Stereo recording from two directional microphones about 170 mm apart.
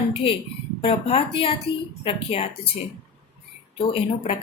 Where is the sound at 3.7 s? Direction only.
35° left (ahead or behind).